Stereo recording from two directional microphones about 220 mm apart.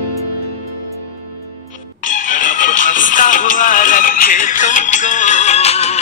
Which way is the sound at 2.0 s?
35° left (ahead or behind).